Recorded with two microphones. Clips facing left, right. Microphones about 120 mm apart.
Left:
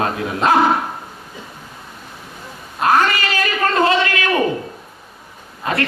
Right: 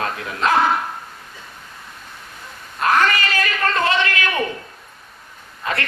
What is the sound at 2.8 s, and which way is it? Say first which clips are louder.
Speech: left 3 dB; 35° left (ahead or behind).